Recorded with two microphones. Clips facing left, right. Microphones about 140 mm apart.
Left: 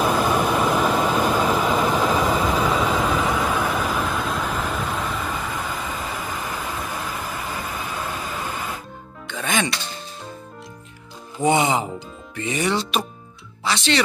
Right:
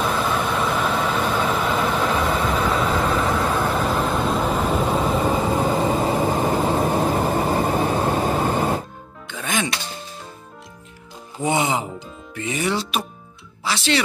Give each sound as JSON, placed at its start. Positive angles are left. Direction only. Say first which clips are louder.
{"t": 0.0, "sound": "vehicle", "louder": "left 2 dB", "side_deg": 5}
{"t": 5.0, "sound": "vehicle", "louder": "right 7 dB", "side_deg": -35}
{"t": 9.3, "sound": "music", "louder": "left 1 dB", "side_deg": -5}
{"t": 12.4, "sound": "speech", "louder": "left 1 dB", "side_deg": -5}